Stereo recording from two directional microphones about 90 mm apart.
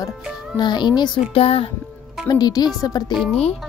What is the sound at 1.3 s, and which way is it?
Music, 90° left.